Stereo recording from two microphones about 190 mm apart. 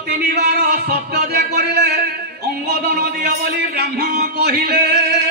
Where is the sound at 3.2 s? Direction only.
55° right (ahead or behind).